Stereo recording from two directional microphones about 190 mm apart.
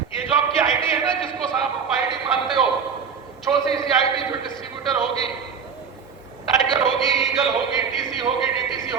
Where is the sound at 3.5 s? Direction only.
10° right (ahead or behind).